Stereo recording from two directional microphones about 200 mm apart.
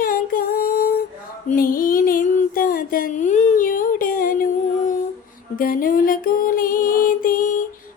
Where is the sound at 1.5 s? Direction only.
45° left (ahead or behind).